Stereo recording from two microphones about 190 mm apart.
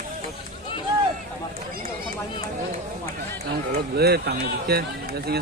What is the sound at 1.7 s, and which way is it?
Run, 50° right (ahead or behind).